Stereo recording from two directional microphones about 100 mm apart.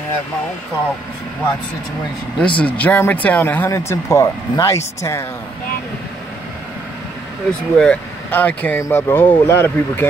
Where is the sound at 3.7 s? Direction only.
30° left (ahead or behind).